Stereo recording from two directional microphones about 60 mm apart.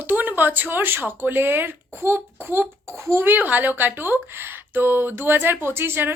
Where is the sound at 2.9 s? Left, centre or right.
Right.